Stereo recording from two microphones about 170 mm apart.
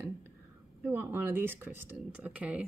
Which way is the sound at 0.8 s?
10° right (ahead or behind).